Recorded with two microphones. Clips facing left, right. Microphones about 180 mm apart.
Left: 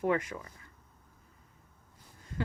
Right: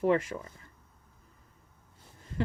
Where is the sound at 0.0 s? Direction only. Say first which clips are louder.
Right 4 dB; 30° right (ahead or behind).